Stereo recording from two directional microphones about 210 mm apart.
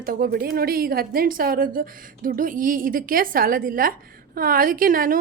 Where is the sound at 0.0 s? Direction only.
45° right (ahead or behind).